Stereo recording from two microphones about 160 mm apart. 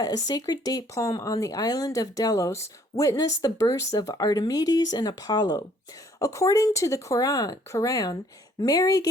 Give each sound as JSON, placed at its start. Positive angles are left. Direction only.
{"t": 0.3, "sound": "speech", "side_deg": 25}